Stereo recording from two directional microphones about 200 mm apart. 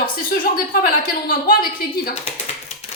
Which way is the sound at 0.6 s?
45° left (ahead or behind).